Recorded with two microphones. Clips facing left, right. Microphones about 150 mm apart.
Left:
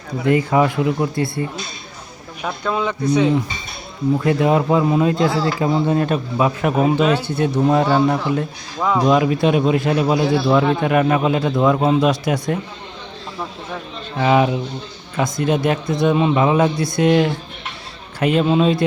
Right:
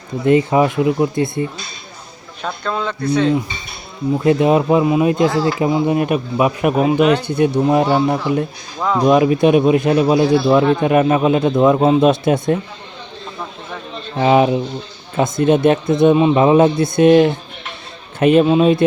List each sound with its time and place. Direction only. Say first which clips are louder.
0.3 s a man's voice: right 3 dB; 20° right (ahead or behind)
2.4 s speech: left 1 dB; 10° left (ahead or behind)
4.2 s a man's voice: right 5 dB; 20° right (ahead or behind)
8.8 s speech: right 1 dB; centre (ahead or behind)
9.0 s a man's voice: right 5 dB; 20° right (ahead or behind)
14.2 s a man's voice: right 3 dB; 25° right (ahead or behind)